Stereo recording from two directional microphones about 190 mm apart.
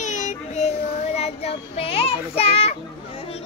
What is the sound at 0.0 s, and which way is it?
Child singing, 40° left (ahead or behind).